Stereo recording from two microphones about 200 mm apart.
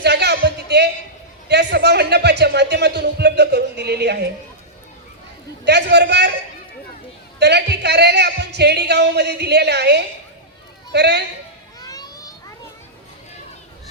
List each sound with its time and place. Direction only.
0.0 s music: 55° right (ahead or behind)
1.5 s a sound: 55° right (ahead or behind)
5.6 s speech: 55° right (ahead or behind)
7.3 s speech: 55° right (ahead or behind)
11.8 s children playing: 20° left (ahead or behind)